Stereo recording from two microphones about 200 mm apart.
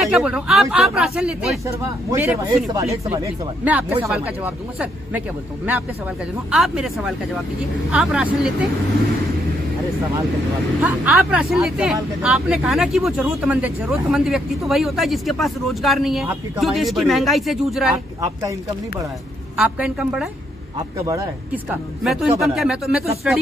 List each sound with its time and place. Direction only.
0.0 s speech: 5° right (ahead or behind)
6.5 s speech: centre (ahead or behind)
10.8 s speech: 5° right (ahead or behind)
18.2 s speech: 15° right (ahead or behind)
19.5 s speech: 5° right (ahead or behind)
20.7 s speech: 15° right (ahead or behind)
22.0 s speech: centre (ahead or behind)